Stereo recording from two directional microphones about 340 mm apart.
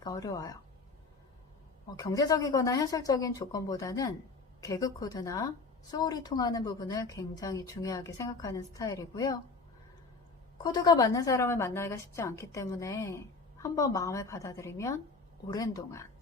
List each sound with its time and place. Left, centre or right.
0.0 s a woman's voice: centre
2.0 s a woman's voice: centre
10.6 s a woman's voice: centre